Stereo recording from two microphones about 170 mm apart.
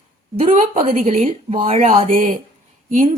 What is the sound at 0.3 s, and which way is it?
Speech, 40° right (ahead or behind).